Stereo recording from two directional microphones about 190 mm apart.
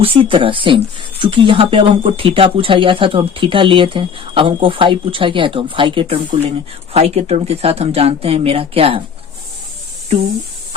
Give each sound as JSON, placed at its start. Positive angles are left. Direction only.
{"t": 0.0, "sound": "speech", "side_deg": -30}